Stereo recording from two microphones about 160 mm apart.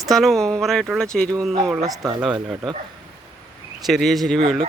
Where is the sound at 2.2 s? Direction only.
5° right (ahead or behind).